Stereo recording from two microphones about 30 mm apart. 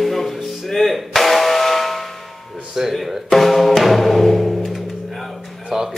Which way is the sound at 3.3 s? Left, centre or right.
Centre.